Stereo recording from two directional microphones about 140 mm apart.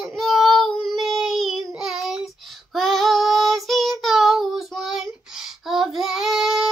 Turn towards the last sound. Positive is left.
turn(degrees=0)  # may be behind; listen again after turning